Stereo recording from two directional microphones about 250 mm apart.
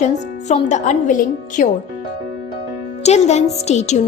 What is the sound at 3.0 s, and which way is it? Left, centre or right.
A woman's voice, left.